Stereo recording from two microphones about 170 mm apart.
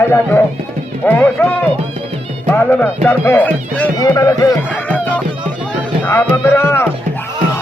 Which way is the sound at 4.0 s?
20° left (ahead or behind).